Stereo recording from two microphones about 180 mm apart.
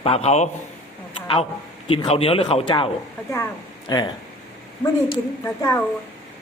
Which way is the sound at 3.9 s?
20° left (ahead or behind).